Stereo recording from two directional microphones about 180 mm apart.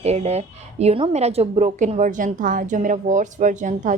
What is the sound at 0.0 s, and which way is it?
A woman's voice, 35° right (ahead or behind).